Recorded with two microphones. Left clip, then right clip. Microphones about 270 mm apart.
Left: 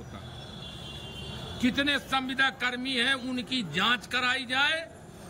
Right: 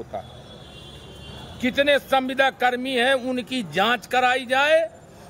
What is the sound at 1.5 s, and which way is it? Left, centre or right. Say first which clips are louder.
A man's voice: right 8 dB; centre.